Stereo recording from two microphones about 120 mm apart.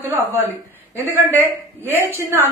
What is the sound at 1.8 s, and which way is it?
Speech, 15° left (ahead or behind).